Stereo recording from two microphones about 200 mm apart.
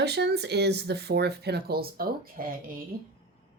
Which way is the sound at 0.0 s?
55° right (ahead or behind).